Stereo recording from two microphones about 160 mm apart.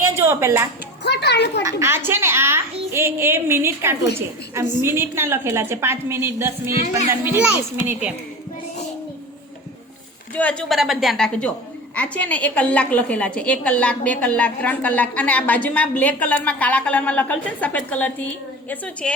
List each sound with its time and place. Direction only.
0.0 s a sound: 15° right (ahead or behind)
1.0 s a child's voice: 90° left
1.6 s a woman's voice: 15° right (ahead or behind)
10.3 s a woman's voice: 10° left (ahead or behind)